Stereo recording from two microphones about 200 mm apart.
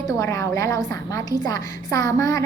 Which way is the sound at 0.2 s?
15° left (ahead or behind).